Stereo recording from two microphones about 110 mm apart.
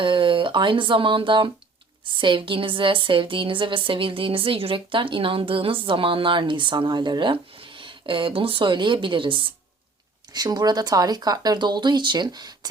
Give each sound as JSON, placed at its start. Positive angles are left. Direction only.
{"t": 0.0, "sound": "speech", "side_deg": -50}
{"t": 10.3, "sound": "speech", "side_deg": -40}